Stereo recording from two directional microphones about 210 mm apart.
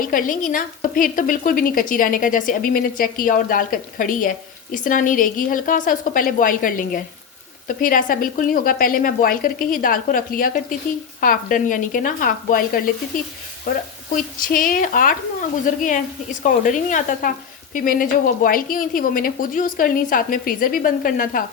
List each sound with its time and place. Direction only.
0.0 s a woman's voice: 40° left (ahead or behind)